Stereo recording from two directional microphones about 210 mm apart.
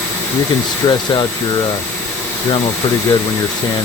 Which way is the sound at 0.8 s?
20° left (ahead or behind).